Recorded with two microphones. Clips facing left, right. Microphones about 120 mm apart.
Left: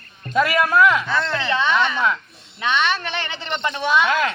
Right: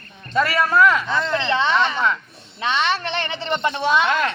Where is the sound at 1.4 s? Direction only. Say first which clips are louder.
Even; 25° right (ahead or behind).